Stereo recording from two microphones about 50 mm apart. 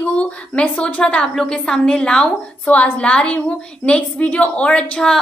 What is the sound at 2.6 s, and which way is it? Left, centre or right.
A woman's voice, left.